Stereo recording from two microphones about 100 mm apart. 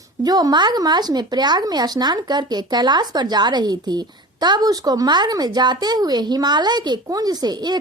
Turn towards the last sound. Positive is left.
turn(degrees=-45)  # may be behind; listen again after turning